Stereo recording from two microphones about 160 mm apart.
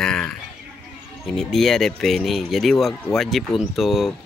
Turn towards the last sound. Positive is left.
turn(degrees=0)  # may be behind; listen again after turning